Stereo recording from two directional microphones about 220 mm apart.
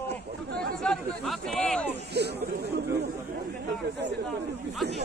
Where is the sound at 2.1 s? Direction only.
50° right (ahead or behind).